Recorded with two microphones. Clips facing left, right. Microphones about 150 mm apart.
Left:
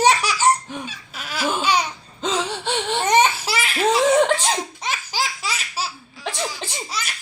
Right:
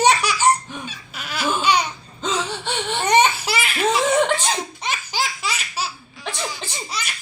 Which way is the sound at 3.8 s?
35° left (ahead or behind).